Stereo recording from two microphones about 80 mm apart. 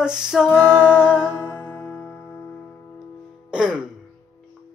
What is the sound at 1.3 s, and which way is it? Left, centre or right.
Music, left.